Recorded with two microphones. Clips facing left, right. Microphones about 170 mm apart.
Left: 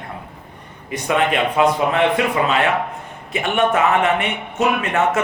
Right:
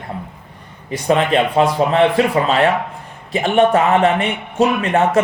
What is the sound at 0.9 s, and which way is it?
A man's voice, 35° right (ahead or behind).